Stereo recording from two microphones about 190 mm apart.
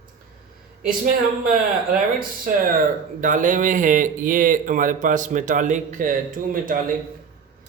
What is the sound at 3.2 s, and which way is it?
Speech, 45° right (ahead or behind).